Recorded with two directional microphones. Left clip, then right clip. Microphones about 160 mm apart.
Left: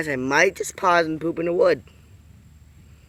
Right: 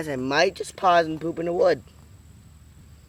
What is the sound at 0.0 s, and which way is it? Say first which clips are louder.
Speech: left 3 dB; 5° left (ahead or behind).